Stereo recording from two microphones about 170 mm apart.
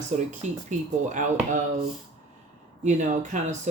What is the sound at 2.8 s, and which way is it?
Speech, 45° right (ahead or behind).